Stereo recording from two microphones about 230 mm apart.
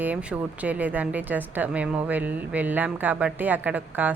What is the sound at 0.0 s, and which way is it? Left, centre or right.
Speech, centre.